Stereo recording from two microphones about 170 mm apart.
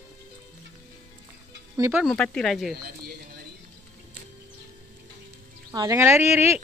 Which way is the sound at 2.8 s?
65° right (ahead or behind).